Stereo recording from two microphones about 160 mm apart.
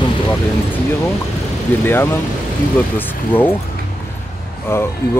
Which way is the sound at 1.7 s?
10° left (ahead or behind).